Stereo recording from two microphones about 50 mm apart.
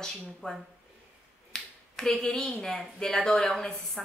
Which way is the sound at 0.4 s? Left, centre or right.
Centre.